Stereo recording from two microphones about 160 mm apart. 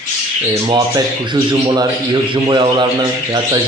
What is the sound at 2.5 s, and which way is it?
Speech, 30° right (ahead or behind).